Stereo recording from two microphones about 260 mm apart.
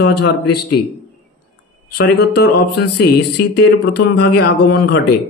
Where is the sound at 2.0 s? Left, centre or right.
Left.